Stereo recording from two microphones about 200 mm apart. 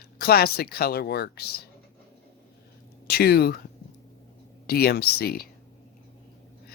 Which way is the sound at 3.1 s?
50° left (ahead or behind).